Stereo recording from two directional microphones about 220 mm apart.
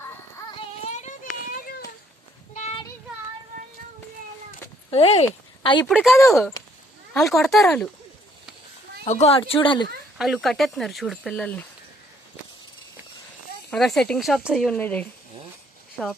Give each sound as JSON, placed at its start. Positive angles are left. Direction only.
{"t": 0.9, "sound": "children playing", "side_deg": 35}
{"t": 2.5, "sound": "a sound", "side_deg": 35}
{"t": 4.9, "sound": "speech", "side_deg": 25}
{"t": 5.8, "sound": "speech", "side_deg": 0}
{"t": 9.0, "sound": "speech", "side_deg": 30}
{"t": 10.2, "sound": "speech", "side_deg": 0}
{"t": 13.7, "sound": "speech", "side_deg": 0}